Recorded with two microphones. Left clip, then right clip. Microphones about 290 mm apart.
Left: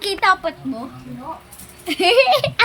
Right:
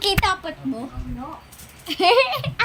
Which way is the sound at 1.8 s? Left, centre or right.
Centre.